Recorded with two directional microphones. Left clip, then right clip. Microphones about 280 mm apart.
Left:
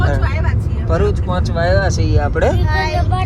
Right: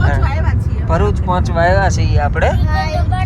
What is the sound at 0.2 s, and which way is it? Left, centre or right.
Speech, centre.